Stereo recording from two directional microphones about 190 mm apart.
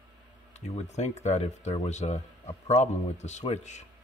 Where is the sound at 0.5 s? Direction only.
35° left (ahead or behind).